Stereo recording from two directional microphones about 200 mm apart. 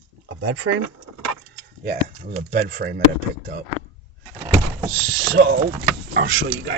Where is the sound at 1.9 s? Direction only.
45° right (ahead or behind).